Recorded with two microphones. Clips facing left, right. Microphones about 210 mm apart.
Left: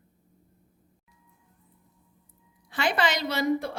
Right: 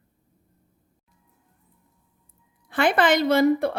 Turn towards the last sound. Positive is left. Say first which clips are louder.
# right 8 dB
turn(degrees=-60)  # may be behind; listen again after turning